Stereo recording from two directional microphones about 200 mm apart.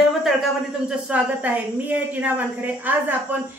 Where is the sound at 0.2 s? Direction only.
Centre (ahead or behind).